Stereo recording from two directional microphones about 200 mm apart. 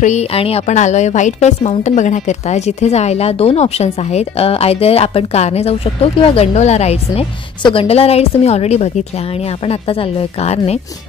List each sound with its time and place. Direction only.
0.0 s a woman's voice: 35° left (ahead or behind)